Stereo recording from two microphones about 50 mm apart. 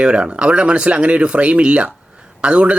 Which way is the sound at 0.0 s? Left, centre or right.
Centre.